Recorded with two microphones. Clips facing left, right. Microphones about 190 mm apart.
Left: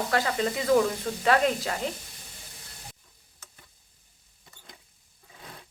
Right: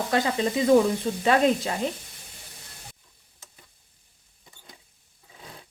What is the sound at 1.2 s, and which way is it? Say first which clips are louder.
Speech: right 2 dB; 20° right (ahead or behind).